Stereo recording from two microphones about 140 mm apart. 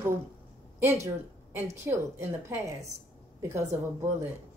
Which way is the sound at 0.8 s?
20° right (ahead or behind).